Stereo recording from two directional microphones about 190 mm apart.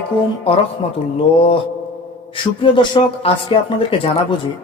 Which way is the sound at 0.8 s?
35° left (ahead or behind).